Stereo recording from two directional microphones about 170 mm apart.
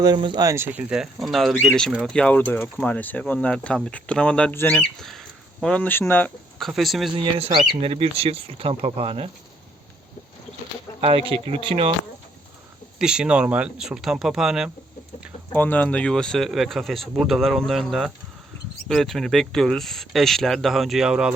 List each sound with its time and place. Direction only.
0.0 s speech: 25° right (ahead or behind); by 6.7 s 10° left (ahead or behind)
6.7 s speech: centre (ahead or behind)
7.3 s speech: 35° right (ahead or behind)
11.0 s speech: 30° right (ahead or behind)
13.0 s speech: 5° right (ahead or behind)
15.5 s speech: 10° left (ahead or behind)